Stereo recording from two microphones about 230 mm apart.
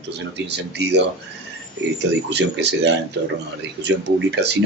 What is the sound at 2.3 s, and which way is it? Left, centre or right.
Speech, right.